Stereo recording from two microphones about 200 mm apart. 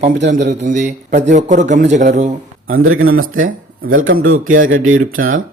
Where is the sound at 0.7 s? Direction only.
35° right (ahead or behind).